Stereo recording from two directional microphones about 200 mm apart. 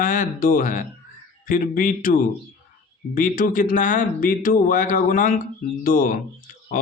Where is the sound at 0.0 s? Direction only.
45° left (ahead or behind).